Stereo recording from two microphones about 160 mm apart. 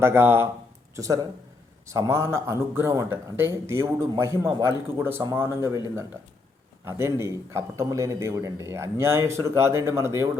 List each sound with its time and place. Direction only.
0.0 s a man's voice: 15° right (ahead or behind)
6.8 s a man's voice: 15° right (ahead or behind)